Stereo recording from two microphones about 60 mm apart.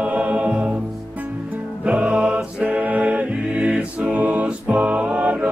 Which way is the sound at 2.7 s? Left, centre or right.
Right.